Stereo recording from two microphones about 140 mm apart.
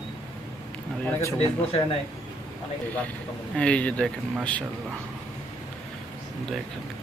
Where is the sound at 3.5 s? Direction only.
5° left (ahead or behind).